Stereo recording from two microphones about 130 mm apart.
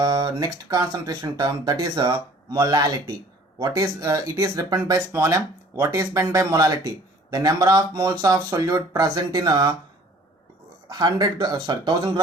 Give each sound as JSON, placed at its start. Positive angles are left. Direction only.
{"t": 0.0, "sound": "speech", "side_deg": -30}
{"t": 10.8, "sound": "speech", "side_deg": -30}